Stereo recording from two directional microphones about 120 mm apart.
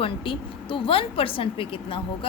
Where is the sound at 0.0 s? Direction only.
45° left (ahead or behind).